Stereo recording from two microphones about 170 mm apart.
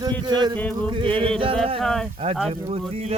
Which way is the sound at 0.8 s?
30° right (ahead or behind).